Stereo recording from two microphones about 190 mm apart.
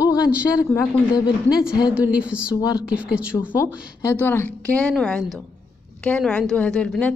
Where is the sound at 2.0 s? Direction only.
5° right (ahead or behind).